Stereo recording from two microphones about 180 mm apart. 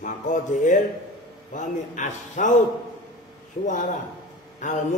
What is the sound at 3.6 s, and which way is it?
Speech, 45° left (ahead or behind).